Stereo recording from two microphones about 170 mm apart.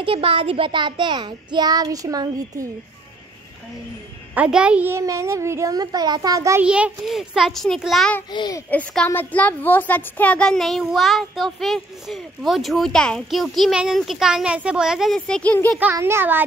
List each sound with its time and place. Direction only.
0.0 s a child's voice: 35° right (ahead or behind)
4.4 s a child's voice: 5° right (ahead or behind)
6.6 s a woman's voice: 5° right (ahead or behind)
8.3 s a child's voice: 25° left (ahead or behind)
8.6 s a woman's voice: 10° left (ahead or behind)
15.8 s a child's voice: 15° right (ahead or behind)